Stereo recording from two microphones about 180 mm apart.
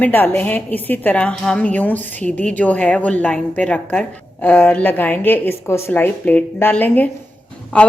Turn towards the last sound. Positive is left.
turn(degrees=5)  # may be behind; listen again after turning